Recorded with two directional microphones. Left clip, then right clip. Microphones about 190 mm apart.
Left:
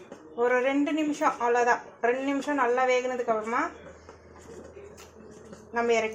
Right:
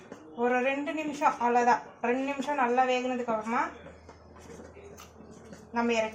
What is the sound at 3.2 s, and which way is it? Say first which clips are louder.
Speech: left 3 dB; 55° left (ahead or behind).